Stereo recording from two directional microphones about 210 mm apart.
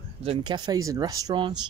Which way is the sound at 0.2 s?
25° right (ahead or behind).